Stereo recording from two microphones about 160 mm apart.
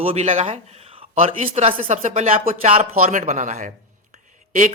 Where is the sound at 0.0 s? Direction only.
40° right (ahead or behind).